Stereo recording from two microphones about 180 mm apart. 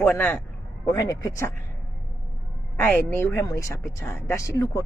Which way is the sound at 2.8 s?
10° left (ahead or behind).